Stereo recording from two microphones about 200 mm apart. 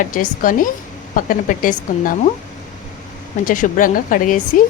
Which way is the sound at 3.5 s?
40° left (ahead or behind).